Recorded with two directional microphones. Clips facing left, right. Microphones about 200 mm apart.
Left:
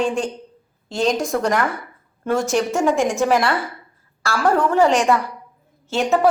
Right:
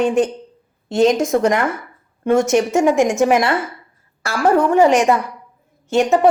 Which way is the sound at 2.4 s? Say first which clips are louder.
Right 4 dB; centre (ahead or behind).